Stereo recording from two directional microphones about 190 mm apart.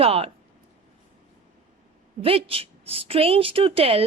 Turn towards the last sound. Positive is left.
turn(degrees=-30)  # may be behind; listen again after turning